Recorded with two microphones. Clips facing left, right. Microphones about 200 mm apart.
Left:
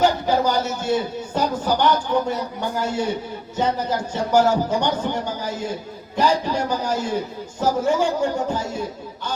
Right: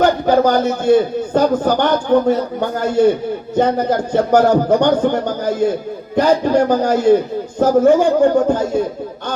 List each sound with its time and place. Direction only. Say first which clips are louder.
0.0 s a man's voice: right 6 dB; 55° right (ahead or behind)